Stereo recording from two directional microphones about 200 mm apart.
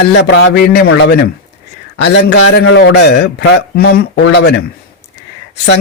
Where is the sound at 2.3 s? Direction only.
80° left; by 4.5 s 55° left (ahead or behind).